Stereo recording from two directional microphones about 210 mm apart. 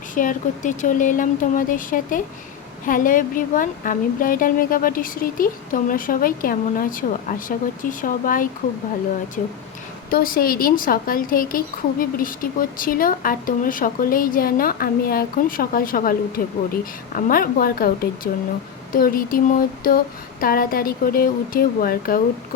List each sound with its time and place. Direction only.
0.1 s a woman's voice: 40° left (ahead or behind)